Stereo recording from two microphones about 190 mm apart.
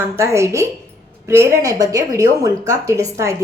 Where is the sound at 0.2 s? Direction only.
15° right (ahead or behind).